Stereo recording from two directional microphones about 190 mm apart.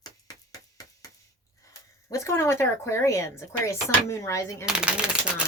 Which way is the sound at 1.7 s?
15° left (ahead or behind).